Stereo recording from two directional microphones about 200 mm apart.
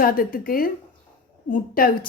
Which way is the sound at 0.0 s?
45° left (ahead or behind).